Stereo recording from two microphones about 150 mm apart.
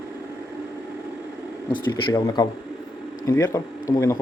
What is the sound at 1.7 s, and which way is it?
Speech, 25° left (ahead or behind).